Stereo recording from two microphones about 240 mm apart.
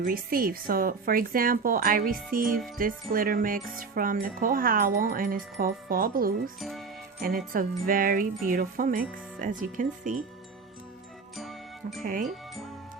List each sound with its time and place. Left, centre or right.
0.0 s wind chime: right
6.6 s speech: centre
7.2 s wind chime: right
11.3 s music: centre
12.0 s wind chime: right